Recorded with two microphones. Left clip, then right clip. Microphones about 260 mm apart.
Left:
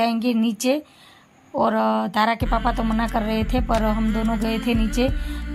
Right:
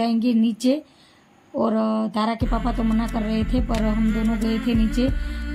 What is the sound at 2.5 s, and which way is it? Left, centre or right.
Speech, left.